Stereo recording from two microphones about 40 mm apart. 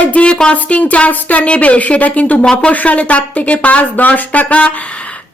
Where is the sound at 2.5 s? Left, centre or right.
Left.